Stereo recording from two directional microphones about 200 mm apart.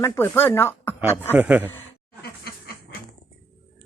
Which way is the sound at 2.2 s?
55° left (ahead or behind).